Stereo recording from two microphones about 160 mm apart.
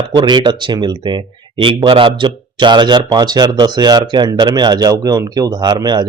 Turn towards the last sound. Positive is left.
turn(degrees=-25)  # may be behind; listen again after turning